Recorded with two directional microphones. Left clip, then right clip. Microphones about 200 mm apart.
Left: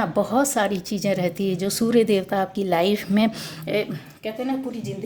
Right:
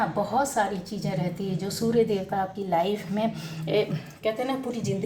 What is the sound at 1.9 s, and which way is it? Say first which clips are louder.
Speech: left 4 dB; 55° left (ahead or behind).